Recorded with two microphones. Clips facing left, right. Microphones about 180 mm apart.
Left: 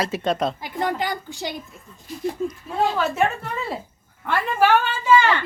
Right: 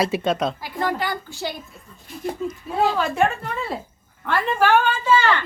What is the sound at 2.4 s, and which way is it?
Speech, centre (ahead or behind).